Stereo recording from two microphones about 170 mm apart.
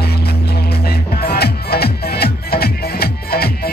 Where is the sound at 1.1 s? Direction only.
65° left (ahead or behind).